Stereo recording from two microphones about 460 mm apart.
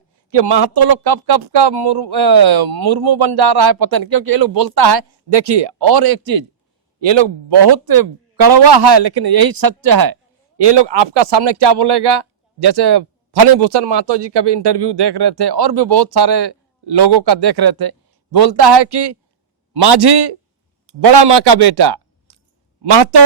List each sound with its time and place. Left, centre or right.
0.3 s speech: right
7.0 s speech: right
10.6 s speech: right